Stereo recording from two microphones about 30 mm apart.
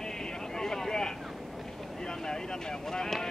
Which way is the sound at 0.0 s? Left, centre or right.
Centre.